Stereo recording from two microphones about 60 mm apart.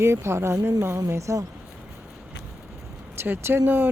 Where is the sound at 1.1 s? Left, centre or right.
Right.